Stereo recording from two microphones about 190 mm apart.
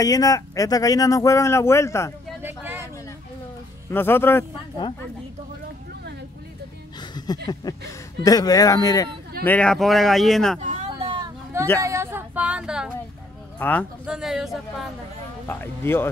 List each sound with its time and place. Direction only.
0.0 s speech: 20° left (ahead or behind)
2.4 s a sound: 10° right (ahead or behind)
3.9 s speech: 10° left (ahead or behind)
7.0 s a sound: 20° left (ahead or behind)
7.7 s speech: 20° left (ahead or behind)
9.4 s a man's voice: 5° left (ahead or behind)
10.6 s a sound: 35° right (ahead or behind)
11.8 s speech: 15° right (ahead or behind)
13.6 s speech: 10° left (ahead or behind)
14.0 s a man's voice: 5° right (ahead or behind)
15.4 s speech: 10° left (ahead or behind)